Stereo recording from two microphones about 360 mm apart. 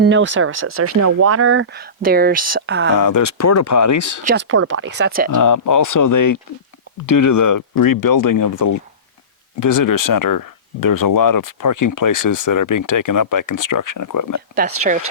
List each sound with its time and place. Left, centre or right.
0.0 s speech: right
2.9 s speech: left
4.2 s speech: right
5.3 s speech: left